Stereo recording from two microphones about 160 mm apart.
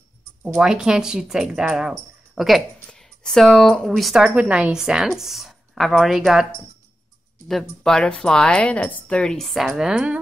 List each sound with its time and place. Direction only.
0.6 s speech: 5° right (ahead or behind)
7.4 s speech: centre (ahead or behind)